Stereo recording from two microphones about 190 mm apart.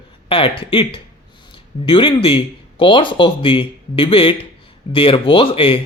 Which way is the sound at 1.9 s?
25° left (ahead or behind).